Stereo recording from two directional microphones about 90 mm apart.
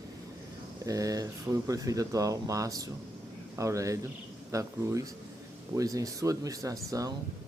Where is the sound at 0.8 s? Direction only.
40° right (ahead or behind).